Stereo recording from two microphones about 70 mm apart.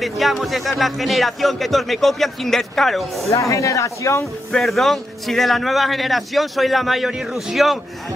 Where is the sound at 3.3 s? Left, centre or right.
Left.